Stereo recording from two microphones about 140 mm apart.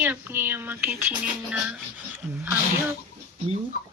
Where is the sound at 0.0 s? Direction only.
15° right (ahead or behind).